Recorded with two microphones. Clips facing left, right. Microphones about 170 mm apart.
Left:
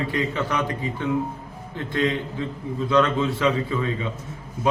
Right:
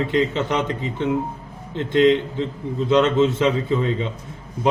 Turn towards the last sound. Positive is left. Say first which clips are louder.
# right 4 dB
turn(degrees=-20)  # may be behind; listen again after turning